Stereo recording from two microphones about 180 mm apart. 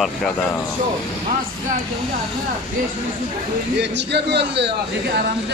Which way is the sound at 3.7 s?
70° right (ahead or behind).